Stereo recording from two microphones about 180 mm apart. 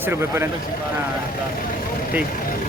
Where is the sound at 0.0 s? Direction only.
15° right (ahead or behind).